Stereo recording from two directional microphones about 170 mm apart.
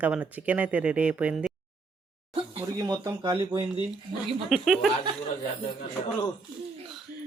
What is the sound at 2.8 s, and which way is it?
Speech, 20° right (ahead or behind).